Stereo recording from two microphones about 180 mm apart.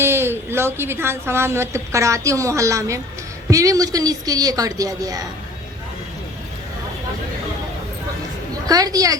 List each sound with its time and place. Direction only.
0.0 s a woman's voice: 15° right (ahead or behind)
8.6 s a woman's voice: 20° right (ahead or behind)